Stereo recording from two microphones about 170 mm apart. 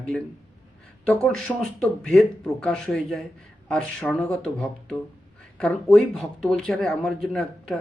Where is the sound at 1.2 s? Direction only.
5° left (ahead or behind).